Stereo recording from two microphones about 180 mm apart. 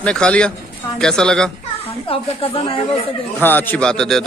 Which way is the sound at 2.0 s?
30° left (ahead or behind).